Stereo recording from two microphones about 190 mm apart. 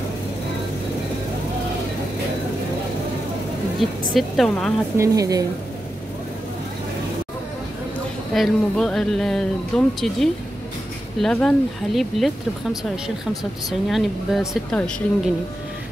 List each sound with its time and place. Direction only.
4.1 s speech: centre (ahead or behind)
4.9 s a woman's voice: 15° right (ahead or behind)
8.4 s speech: centre (ahead or behind)